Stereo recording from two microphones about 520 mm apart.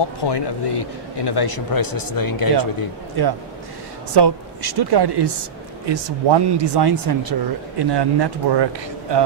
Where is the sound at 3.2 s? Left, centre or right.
Right.